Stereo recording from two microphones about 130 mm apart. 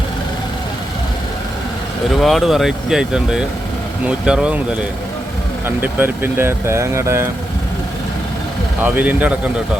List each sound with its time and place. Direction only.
2.2 s speech: centre (ahead or behind)
5.6 s speech: 15° right (ahead or behind)
8.8 s speech: 10° right (ahead or behind)